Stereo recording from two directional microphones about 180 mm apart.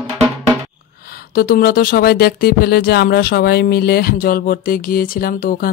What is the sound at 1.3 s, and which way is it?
Speech, 55° left (ahead or behind).